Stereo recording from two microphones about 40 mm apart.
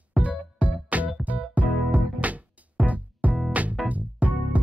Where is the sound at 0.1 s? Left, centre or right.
Right.